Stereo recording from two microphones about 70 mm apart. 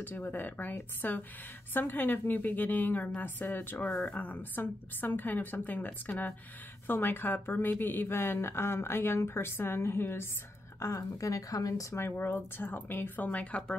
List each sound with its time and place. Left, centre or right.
0.0 s a woman's voice: left
3.8 s speech: centre
4.1 s a woman's voice: left
10.8 s speech: left
12.0 s a woman's voice: left